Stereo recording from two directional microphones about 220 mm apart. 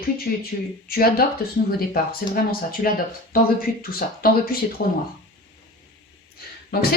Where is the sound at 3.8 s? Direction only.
40° left (ahead or behind).